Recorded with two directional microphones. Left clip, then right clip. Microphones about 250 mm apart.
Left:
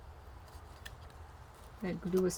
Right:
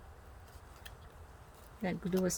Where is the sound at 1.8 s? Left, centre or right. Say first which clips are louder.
Left 1 dB; right.